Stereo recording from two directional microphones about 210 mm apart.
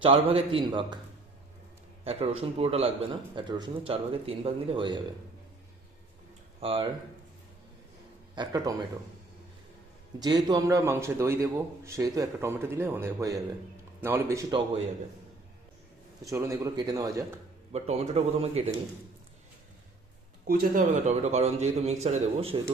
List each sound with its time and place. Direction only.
0.0 s speech: 25° right (ahead or behind)
2.0 s speech: 30° right (ahead or behind)
6.6 s speech: 25° right (ahead or behind)
8.4 s a man's voice: 15° right (ahead or behind)
10.2 s a man's voice: 20° right (ahead or behind)
16.3 s a man's voice: 15° right (ahead or behind)
17.7 s speech: 30° right (ahead or behind)
20.5 s a man's voice: 40° right (ahead or behind)